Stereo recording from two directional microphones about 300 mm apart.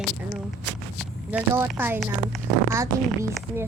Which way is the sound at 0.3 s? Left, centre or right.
Centre.